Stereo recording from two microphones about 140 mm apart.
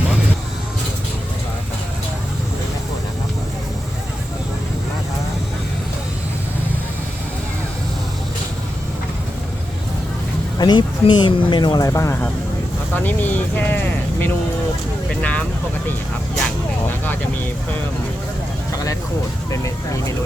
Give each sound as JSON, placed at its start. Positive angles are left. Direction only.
{"t": 10.6, "sound": "speech", "side_deg": 35}
{"t": 19.5, "sound": "speech", "side_deg": 20}